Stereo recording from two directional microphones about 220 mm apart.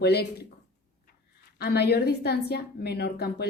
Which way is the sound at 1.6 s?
45° left (ahead or behind).